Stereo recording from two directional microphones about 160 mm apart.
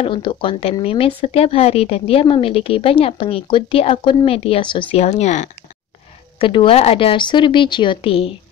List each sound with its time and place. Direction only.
0.0 s a woman's voice: 30° left (ahead or behind)
6.4 s a woman's voice: 35° left (ahead or behind)